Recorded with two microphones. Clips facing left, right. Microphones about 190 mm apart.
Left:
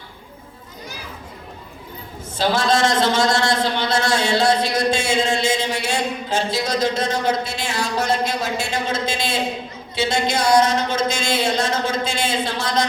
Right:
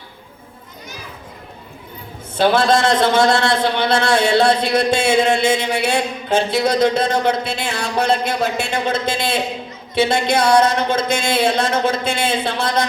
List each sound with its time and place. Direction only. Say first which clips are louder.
2.4 s a man's voice: right 4 dB; 60° right (ahead or behind)